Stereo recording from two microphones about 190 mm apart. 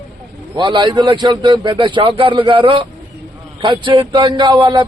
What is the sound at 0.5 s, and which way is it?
Speech, 25° right (ahead or behind).